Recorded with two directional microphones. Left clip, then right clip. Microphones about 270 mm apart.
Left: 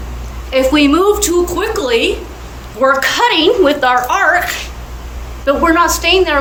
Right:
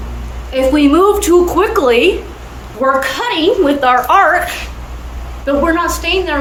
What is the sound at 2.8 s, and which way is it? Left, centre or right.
A woman's voice, centre.